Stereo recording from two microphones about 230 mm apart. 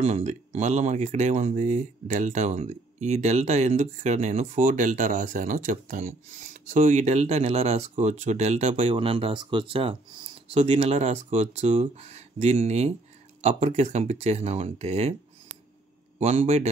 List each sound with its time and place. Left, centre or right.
0.0 s speech: right
16.2 s speech: right